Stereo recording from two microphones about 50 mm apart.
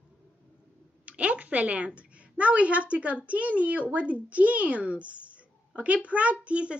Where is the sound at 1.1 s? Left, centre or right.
Right.